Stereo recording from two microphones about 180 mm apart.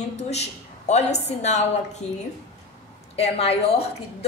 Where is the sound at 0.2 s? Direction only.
35° left (ahead or behind).